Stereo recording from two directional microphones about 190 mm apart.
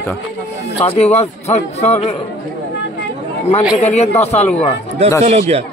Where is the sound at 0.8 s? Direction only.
35° left (ahead or behind).